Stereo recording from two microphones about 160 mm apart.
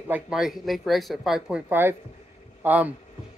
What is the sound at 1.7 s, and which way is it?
Speech, 15° right (ahead or behind).